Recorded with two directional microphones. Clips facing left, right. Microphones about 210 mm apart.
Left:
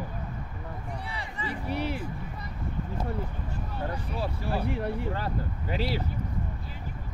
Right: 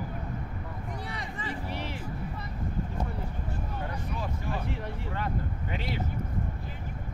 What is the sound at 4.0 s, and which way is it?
Speech, 35° left (ahead or behind).